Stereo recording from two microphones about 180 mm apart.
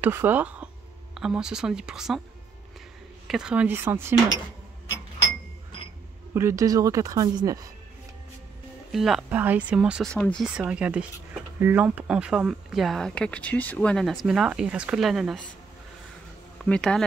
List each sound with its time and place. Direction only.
0.0 s speech: 10° right (ahead or behind)
3.3 s speech: 5° right (ahead or behind)
6.3 s speech: 15° right (ahead or behind)
8.9 s speech: centre (ahead or behind)
10.4 s speech: 5° right (ahead or behind)
16.6 s speech: 5° left (ahead or behind)